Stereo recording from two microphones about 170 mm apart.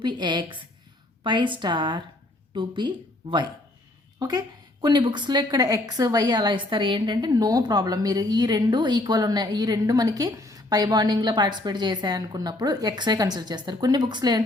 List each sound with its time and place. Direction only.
0.0 s a woman's voice: 25° right (ahead or behind)